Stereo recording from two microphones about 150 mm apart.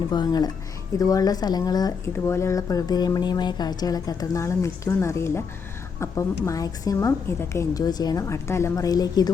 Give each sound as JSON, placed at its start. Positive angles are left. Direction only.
{"t": 0.1, "sound": "speech", "side_deg": 25}